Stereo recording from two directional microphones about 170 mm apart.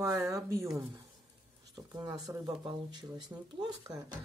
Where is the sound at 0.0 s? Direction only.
15° right (ahead or behind).